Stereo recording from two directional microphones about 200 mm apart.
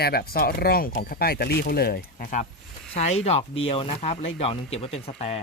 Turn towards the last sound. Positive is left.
turn(degrees=30)  # may be behind; listen again after turning